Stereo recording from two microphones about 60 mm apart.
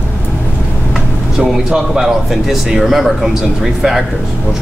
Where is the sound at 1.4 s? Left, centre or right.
Centre.